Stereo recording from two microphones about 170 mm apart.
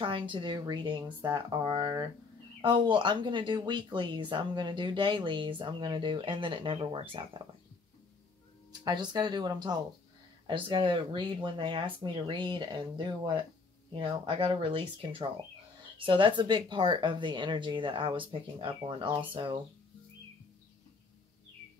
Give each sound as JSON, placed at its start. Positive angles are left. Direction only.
{"t": 0.0, "sound": "speech", "side_deg": -30}
{"t": 8.8, "sound": "speech", "side_deg": -25}